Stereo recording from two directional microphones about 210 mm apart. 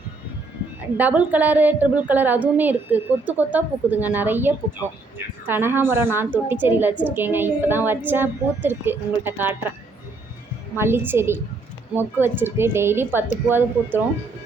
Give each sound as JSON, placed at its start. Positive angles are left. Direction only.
{"t": 0.9, "sound": "a woman's voice", "side_deg": -5}
{"t": 10.8, "sound": "a woman's voice", "side_deg": -10}